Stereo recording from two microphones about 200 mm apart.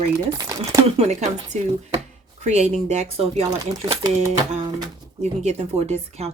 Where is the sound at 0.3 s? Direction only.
15° right (ahead or behind).